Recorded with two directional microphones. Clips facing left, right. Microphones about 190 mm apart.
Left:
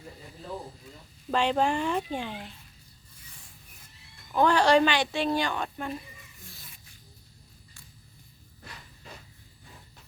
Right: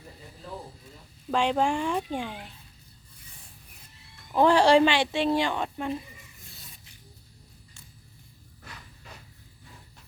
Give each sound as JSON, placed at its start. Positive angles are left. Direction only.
{"t": 1.3, "sound": "speech", "side_deg": -10}
{"t": 4.4, "sound": "speech", "side_deg": -30}